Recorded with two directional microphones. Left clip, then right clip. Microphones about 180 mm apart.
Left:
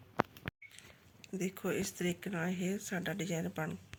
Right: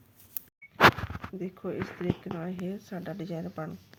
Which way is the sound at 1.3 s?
15° right (ahead or behind).